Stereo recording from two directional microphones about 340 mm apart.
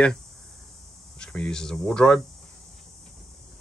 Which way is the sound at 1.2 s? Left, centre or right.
Centre.